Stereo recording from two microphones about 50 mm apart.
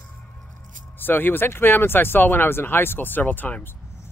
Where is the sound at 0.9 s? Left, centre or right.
Left.